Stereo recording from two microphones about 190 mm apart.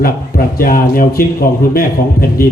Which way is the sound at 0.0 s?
50° left (ahead or behind).